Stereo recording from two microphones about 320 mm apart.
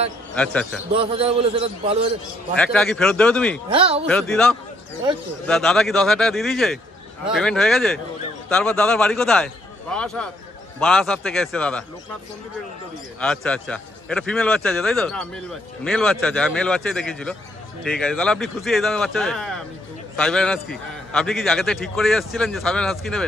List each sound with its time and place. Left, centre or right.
0.3 s a man's voice: centre
0.9 s a man's voice: centre
2.5 s speech: centre
3.7 s a man's voice: centre
4.1 s speech: centre
13.2 s speech: centre